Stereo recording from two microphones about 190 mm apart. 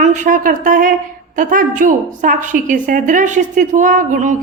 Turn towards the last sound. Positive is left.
turn(degrees=-40)  # may be behind; listen again after turning